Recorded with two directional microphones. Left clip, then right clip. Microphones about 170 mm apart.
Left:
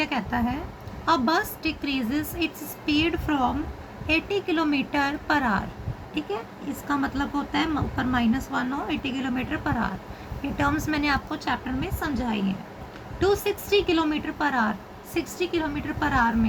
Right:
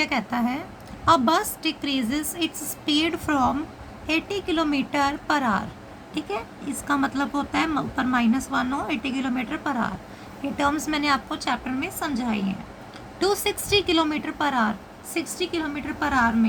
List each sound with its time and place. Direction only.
0.0 s a woman's voice: 25° right (ahead or behind)